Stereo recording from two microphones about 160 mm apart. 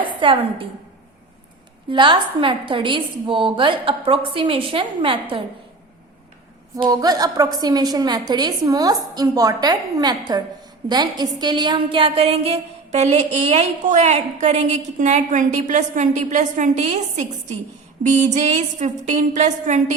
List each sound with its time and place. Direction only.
0.2 s a woman's voice: 35° right (ahead or behind)
1.9 s a woman's voice: 30° right (ahead or behind)
6.7 s a woman's voice: 25° right (ahead or behind); by 19.8 s 50° right (ahead or behind)